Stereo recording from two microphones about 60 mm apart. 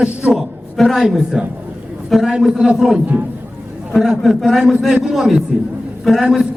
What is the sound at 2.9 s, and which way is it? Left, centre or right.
Speech, right.